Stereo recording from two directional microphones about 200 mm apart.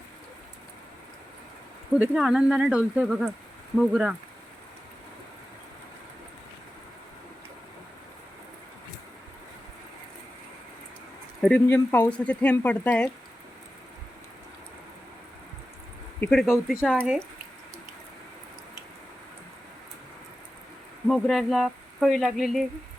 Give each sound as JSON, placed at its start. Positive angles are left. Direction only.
{"t": 2.0, "sound": "speech", "side_deg": -5}
{"t": 11.4, "sound": "speech", "side_deg": 5}
{"t": 16.2, "sound": "speech", "side_deg": 0}
{"t": 21.1, "sound": "speech", "side_deg": 0}